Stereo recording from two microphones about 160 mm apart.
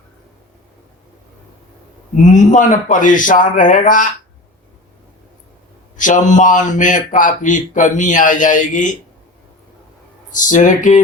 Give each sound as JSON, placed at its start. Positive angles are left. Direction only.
{"t": 2.2, "sound": "a man's voice", "side_deg": 50}
{"t": 6.0, "sound": "a man's voice", "side_deg": 50}
{"t": 10.3, "sound": "a man's voice", "side_deg": 50}